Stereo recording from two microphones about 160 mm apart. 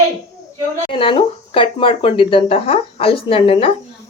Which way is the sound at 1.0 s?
35° left (ahead or behind).